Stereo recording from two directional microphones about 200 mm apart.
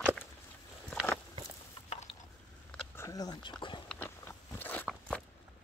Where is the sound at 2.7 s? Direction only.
15° left (ahead or behind).